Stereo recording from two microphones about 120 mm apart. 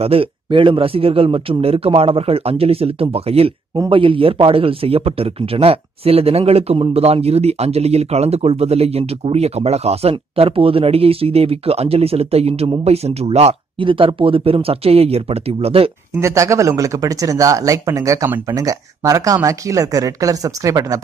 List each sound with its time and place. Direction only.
0.0 s a man's voice: 50° right (ahead or behind)
16.2 s speech: 25° right (ahead or behind)